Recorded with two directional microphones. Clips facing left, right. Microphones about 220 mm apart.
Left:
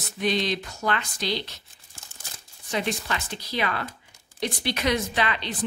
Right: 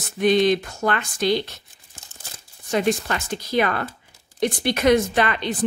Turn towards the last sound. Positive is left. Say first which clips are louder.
# right 6 dB
turn(degrees=-50)  # may be behind; listen again after turning